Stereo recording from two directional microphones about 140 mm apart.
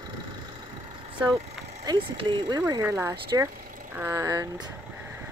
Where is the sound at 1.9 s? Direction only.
35° right (ahead or behind).